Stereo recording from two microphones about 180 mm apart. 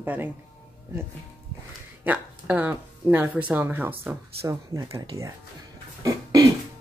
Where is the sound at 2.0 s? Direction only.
10° right (ahead or behind).